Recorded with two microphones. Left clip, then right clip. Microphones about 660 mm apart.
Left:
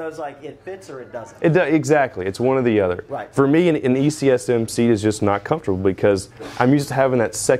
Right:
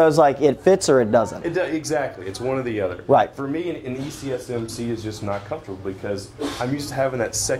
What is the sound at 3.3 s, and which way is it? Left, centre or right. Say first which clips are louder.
Speech: left 11 dB; left.